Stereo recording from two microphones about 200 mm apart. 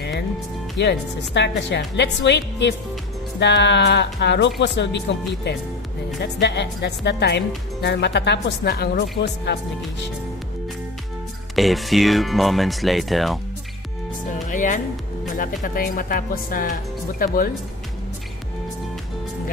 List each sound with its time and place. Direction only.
0.7 s speech: 60° left (ahead or behind)
11.5 s speech: centre (ahead or behind)
14.5 s speech: 40° left (ahead or behind)